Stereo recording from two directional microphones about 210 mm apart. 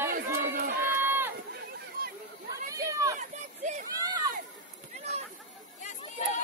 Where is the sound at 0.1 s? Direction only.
50° right (ahead or behind).